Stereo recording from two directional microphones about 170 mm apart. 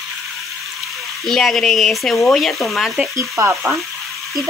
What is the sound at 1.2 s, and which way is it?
Speech, centre (ahead or behind).